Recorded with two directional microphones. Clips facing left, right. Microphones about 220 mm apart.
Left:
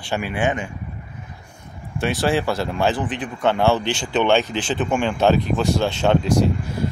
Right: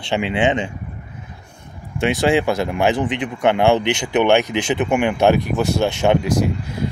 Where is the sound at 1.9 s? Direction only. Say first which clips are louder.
Right 4 dB; 20° right (ahead or behind).